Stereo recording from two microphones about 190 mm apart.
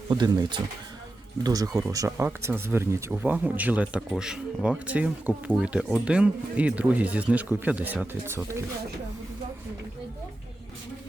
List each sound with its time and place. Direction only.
0.1 s speech: 25° right (ahead or behind); by 8.4 s 5° right (ahead or behind)